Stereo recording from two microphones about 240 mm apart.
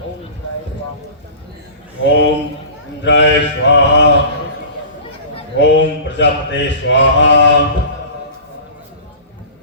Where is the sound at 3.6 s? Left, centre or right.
Left.